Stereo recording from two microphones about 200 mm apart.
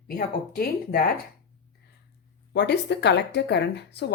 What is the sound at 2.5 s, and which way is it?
Speech, 60° left (ahead or behind).